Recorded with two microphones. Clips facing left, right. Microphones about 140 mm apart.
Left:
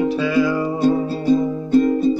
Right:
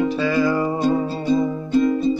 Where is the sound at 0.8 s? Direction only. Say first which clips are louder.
Left 2 dB; 45° left (ahead or behind).